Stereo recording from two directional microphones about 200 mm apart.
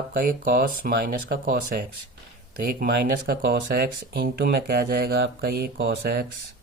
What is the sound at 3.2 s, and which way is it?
Speech, 50° right (ahead or behind).